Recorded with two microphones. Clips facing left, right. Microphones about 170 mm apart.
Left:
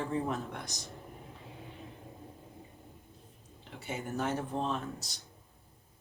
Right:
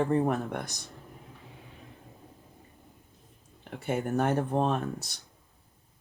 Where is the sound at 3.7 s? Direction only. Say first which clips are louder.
Right 8 dB; 55° right (ahead or behind).